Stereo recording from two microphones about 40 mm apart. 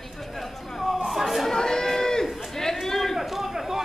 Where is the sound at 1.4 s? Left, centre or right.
Centre.